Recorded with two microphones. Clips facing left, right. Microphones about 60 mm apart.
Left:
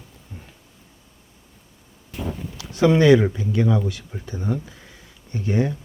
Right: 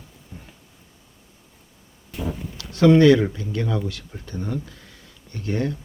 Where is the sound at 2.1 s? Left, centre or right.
Centre.